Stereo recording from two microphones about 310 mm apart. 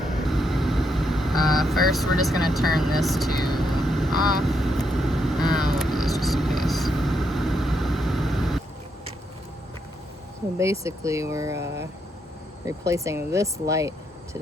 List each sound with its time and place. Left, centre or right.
0.2 s vehicle: centre
1.5 s speech: centre
3.3 s vehicle: centre
3.6 s vehicle: centre
10.6 s speech: centre